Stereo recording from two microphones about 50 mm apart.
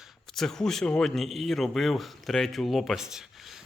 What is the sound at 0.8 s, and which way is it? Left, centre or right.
Speech, centre.